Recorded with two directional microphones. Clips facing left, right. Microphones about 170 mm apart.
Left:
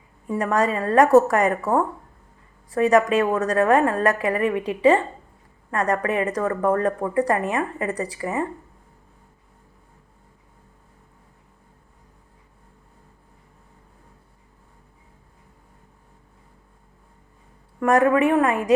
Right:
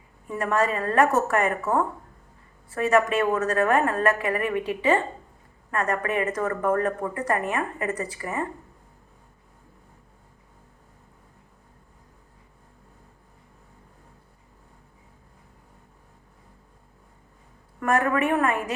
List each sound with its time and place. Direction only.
0.3 s speech: 35° left (ahead or behind)
18.0 s speech: 30° left (ahead or behind)